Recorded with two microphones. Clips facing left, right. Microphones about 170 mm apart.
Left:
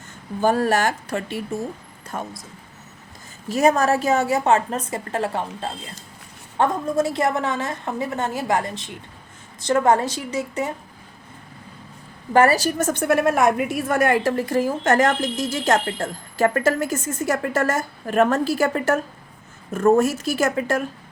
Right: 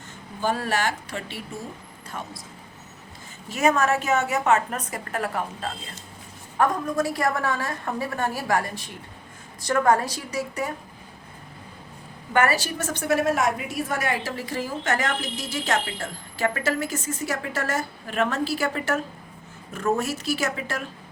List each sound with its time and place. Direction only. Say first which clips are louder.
0.4 s a woman's voice: left 6 dB; 45° left (ahead or behind)
3.5 s a woman's voice: left 4 dB; 35° left (ahead or behind)
12.3 s a woman's voice: left 6 dB; 35° left (ahead or behind)